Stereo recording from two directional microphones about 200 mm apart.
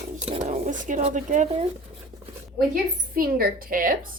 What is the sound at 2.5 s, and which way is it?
A woman's voice, 45° right (ahead or behind).